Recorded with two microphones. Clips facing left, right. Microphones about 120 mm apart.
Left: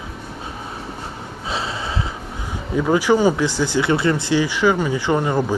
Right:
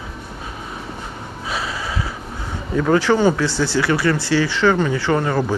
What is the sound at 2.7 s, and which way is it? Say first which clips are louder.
Speech: even; 10° left (ahead or behind).